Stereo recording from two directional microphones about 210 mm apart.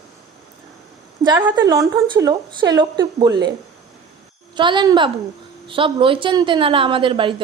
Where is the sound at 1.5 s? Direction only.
20° right (ahead or behind).